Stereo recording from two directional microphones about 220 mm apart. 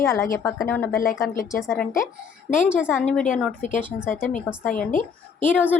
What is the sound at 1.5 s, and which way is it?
A woman's voice, 10° left (ahead or behind).